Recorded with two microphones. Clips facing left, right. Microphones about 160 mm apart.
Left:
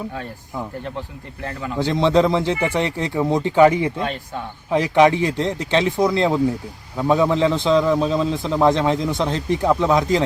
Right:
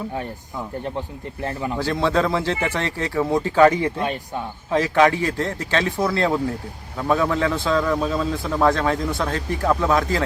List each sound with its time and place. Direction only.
0.9 s speech: 20° right (ahead or behind)
1.8 s a man's voice: 20° left (ahead or behind)
3.9 s speech: 15° right (ahead or behind)
4.7 s speech: 15° left (ahead or behind)